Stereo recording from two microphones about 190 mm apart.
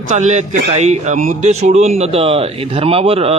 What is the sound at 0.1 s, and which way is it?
A man's voice, 35° right (ahead or behind).